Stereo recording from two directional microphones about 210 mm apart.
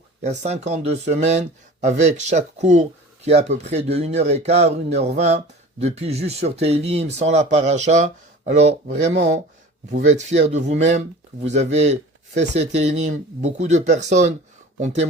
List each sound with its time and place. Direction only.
0.2 s speech: 30° right (ahead or behind)